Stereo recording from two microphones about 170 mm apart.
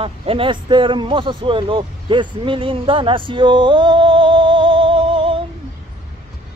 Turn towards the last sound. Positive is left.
turn(degrees=-30)  # may be behind; listen again after turning